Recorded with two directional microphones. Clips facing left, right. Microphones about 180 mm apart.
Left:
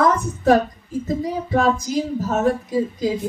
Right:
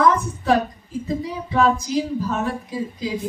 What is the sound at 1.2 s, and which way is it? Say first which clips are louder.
A woman's voice: even; 45° left (ahead or behind).